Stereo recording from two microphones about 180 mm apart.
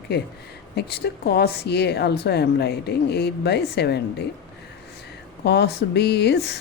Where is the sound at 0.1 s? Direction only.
65° left (ahead or behind).